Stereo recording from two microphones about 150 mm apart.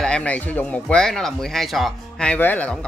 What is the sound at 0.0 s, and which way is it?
Speech, 5° left (ahead or behind).